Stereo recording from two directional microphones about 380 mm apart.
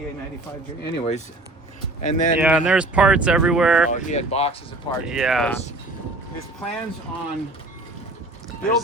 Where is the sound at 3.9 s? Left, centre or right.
Centre.